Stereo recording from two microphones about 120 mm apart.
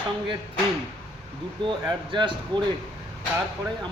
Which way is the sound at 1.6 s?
45° right (ahead or behind).